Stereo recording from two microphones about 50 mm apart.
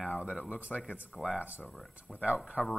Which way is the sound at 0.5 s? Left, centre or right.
Right.